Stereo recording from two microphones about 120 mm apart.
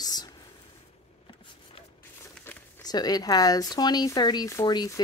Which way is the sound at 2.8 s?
35° left (ahead or behind).